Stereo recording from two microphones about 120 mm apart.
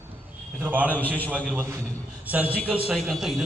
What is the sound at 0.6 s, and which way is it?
Speech, 15° right (ahead or behind).